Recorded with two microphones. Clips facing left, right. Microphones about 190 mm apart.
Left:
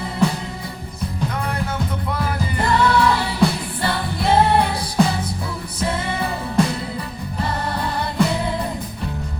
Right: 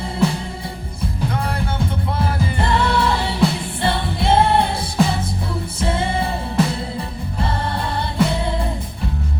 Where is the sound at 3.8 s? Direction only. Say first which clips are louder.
Right 2 dB; 25° right (ahead or behind).